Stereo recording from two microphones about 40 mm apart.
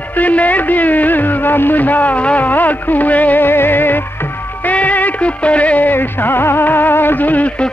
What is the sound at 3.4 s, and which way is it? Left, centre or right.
Music, left.